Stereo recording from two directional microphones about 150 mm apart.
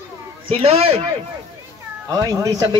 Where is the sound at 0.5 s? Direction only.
40° right (ahead or behind).